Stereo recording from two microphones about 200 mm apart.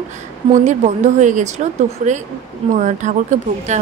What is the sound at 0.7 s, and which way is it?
Speech, 35° right (ahead or behind).